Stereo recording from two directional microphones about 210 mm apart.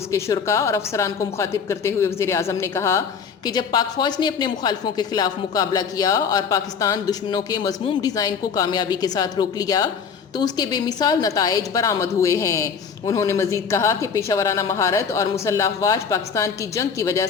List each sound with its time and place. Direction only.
0.1 s a woman's voice: 15° left (ahead or behind)